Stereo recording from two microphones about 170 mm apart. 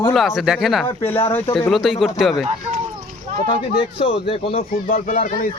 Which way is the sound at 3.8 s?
35° left (ahead or behind).